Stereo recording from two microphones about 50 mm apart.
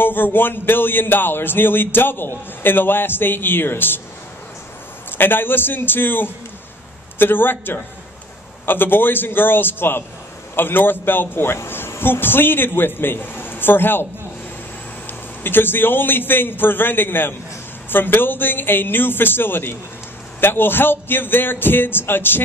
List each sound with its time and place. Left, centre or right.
0.0 s speech: left
5.1 s speech: left
15.0 s speech: left